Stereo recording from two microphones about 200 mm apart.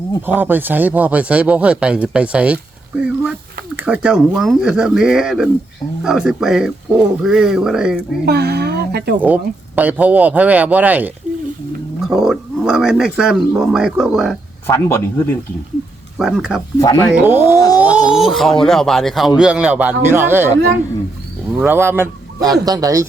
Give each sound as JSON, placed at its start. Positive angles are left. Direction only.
{"t": 0.3, "sound": "speech", "side_deg": -10}
{"t": 8.2, "sound": "speech", "side_deg": -50}
{"t": 9.2, "sound": "speech", "side_deg": -10}
{"t": 14.7, "sound": "speech", "side_deg": 15}
{"t": 16.1, "sound": "speech", "side_deg": 0}
{"t": 16.8, "sound": "speech", "side_deg": 20}
{"t": 17.1, "sound": "speech", "side_deg": -10}
{"t": 17.7, "sound": "a sound", "side_deg": -5}
{"t": 18.6, "sound": "speech", "side_deg": 0}
{"t": 21.6, "sound": "speech", "side_deg": -10}